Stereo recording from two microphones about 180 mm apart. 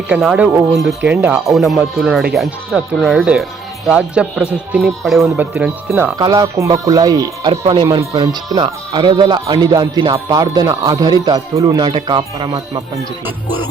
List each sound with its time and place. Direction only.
0.1 s speech: 5° right (ahead or behind)
6.1 s speech: 20° right (ahead or behind)
7.5 s speech: 35° right (ahead or behind)